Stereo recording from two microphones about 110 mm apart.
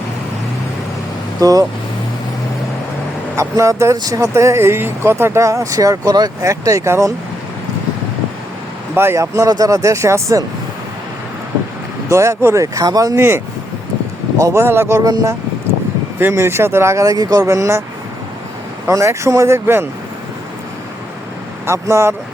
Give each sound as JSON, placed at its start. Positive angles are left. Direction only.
{"t": 1.4, "sound": "speech", "side_deg": -35}
{"t": 3.3, "sound": "speech", "side_deg": -30}
{"t": 9.0, "sound": "speech", "side_deg": -20}
{"t": 12.0, "sound": "speech", "side_deg": -25}
{"t": 13.1, "sound": "speech", "side_deg": -20}
{"t": 15.0, "sound": "speech", "side_deg": -35}
{"t": 16.1, "sound": "speech", "side_deg": -20}
{"t": 18.9, "sound": "speech", "side_deg": -25}
{"t": 21.7, "sound": "speech", "side_deg": -25}